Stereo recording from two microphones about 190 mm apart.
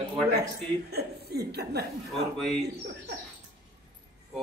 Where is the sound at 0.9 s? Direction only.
55° right (ahead or behind).